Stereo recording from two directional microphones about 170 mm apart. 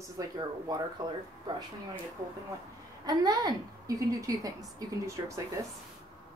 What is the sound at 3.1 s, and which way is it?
A woman's voice, 20° right (ahead or behind).